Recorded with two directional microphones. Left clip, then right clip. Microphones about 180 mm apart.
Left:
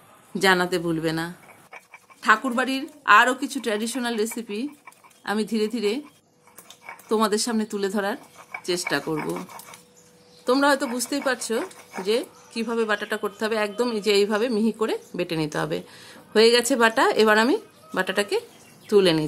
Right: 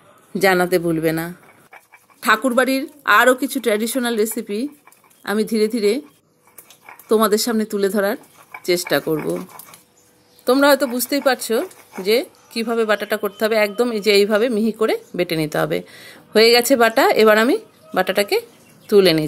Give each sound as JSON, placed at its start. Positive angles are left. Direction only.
{"t": 0.3, "sound": "a woman's voice", "side_deg": -15}
{"t": 7.1, "sound": "a woman's voice", "side_deg": -20}
{"t": 10.4, "sound": "a woman's voice", "side_deg": -15}